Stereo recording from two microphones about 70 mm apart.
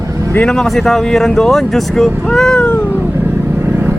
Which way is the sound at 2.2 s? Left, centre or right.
Centre.